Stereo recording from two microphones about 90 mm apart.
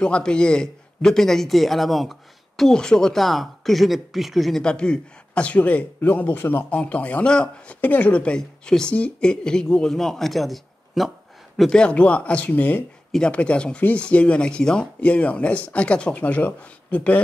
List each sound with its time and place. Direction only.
0.0 s a man's voice: 10° left (ahead or behind)
11.8 s speech: 15° left (ahead or behind)